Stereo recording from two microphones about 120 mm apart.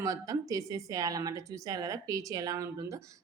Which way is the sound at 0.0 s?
30° right (ahead or behind).